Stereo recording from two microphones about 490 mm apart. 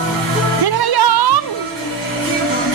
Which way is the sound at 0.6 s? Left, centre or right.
Right.